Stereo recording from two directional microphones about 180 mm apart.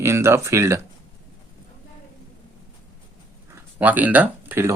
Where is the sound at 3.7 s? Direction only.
10° right (ahead or behind).